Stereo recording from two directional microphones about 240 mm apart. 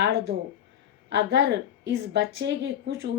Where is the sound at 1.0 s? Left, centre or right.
Right.